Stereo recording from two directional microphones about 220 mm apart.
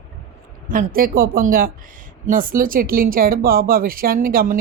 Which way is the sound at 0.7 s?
40° right (ahead or behind).